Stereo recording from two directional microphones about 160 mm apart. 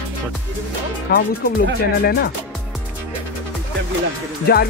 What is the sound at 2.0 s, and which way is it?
Speech, 90° left.